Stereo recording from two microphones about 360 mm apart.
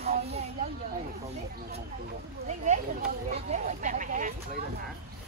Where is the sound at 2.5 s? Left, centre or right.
Centre.